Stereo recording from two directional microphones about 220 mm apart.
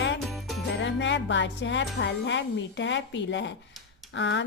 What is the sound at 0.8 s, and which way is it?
A woman's voice, 55° left (ahead or behind).